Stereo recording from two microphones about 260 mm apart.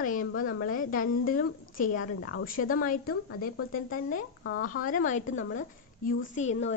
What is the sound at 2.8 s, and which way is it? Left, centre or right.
A woman's voice, left.